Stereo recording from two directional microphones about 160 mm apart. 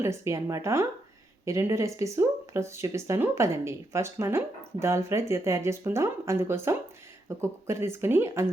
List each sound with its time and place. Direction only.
0.0 s speech: 20° right (ahead or behind)